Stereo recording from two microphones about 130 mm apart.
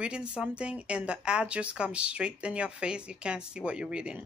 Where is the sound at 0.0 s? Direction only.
10° right (ahead or behind).